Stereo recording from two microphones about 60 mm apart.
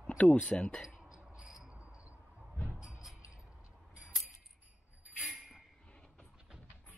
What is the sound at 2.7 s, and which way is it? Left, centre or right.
Music, centre.